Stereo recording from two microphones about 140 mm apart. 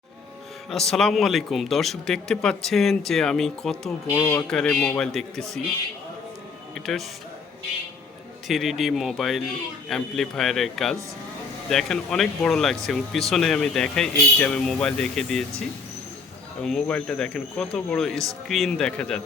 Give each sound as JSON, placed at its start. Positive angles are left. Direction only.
{"t": 0.7, "sound": "speech", "side_deg": 0}
{"t": 4.0, "sound": "speech", "side_deg": 20}
{"t": 4.4, "sound": "speech", "side_deg": 5}
{"t": 6.7, "sound": "speech", "side_deg": 0}
{"t": 8.4, "sound": "speech", "side_deg": 0}
{"t": 16.6, "sound": "speech", "side_deg": 5}